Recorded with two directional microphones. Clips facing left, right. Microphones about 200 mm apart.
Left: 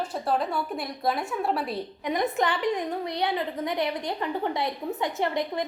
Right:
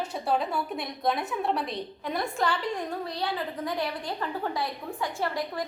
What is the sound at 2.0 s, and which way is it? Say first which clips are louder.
A woman's voice: left 3 dB; 15° left (ahead or behind).